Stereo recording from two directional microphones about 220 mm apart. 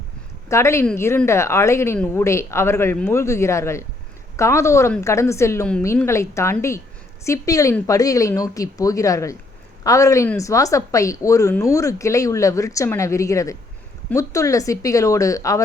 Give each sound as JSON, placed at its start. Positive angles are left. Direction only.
{"t": 0.4, "sound": "a woman's voice", "side_deg": 10}